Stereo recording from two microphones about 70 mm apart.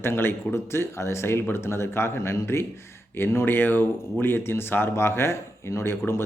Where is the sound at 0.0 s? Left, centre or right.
Left.